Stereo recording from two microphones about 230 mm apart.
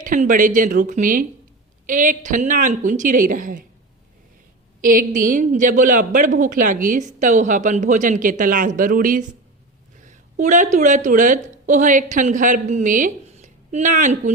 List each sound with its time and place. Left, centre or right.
0.0 s a woman's voice: right
4.8 s a woman's voice: right